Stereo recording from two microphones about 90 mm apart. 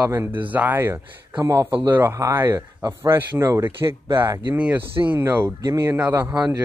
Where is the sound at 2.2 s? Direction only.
35° right (ahead or behind).